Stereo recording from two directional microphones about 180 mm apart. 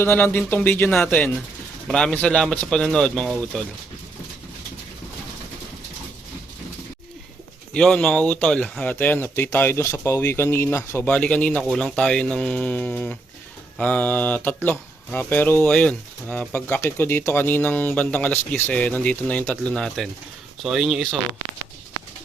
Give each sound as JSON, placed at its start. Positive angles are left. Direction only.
{"t": 0.0, "sound": "speech", "side_deg": 10}
{"t": 7.7, "sound": "speech", "side_deg": 5}